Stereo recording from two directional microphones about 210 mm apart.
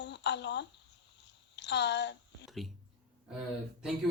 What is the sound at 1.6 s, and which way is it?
Speech, 55° left (ahead or behind).